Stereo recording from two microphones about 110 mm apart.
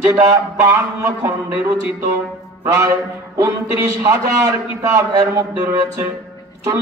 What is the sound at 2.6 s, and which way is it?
A man's voice, 25° right (ahead or behind).